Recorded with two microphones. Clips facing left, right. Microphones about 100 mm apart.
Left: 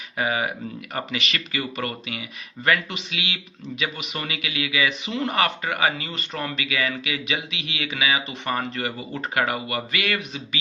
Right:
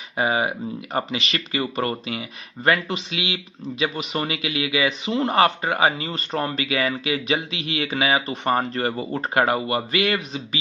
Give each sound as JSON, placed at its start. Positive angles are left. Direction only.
{"t": 0.2, "sound": "speech", "side_deg": -30}